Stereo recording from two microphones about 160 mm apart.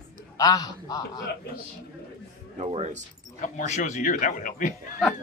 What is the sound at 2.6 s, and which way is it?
Speech, 45° right (ahead or behind).